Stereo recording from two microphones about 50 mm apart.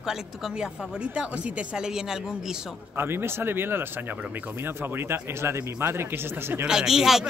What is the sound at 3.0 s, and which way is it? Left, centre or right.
Speech, right.